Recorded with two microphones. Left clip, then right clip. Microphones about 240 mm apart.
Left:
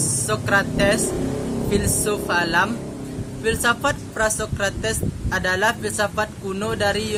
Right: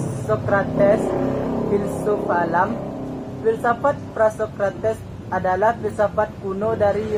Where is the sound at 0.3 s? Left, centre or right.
Left.